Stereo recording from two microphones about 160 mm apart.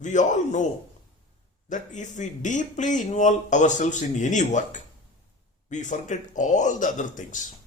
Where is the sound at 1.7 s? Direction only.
50° left (ahead or behind).